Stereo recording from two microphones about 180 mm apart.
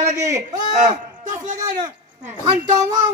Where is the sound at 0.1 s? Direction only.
15° right (ahead or behind).